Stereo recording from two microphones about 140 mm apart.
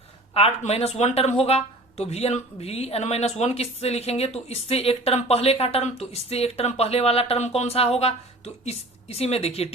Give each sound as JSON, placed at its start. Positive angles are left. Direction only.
{"t": 0.3, "sound": "speech", "side_deg": 45}